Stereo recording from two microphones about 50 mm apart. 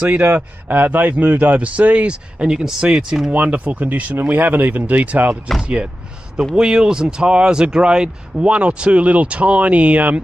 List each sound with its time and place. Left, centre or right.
0.2 s a man's voice: right; by 3.3 s centre
3.3 s speech: right
6.5 s a man's voice: centre; by 10.2 s right